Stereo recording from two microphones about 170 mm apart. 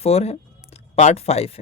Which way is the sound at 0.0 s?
35° left (ahead or behind).